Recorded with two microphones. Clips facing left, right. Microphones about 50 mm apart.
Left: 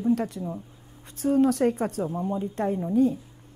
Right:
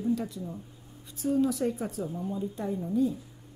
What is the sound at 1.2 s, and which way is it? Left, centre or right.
Speech, left.